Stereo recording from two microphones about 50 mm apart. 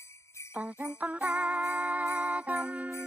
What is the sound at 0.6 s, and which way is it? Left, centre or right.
Jingle bell, right.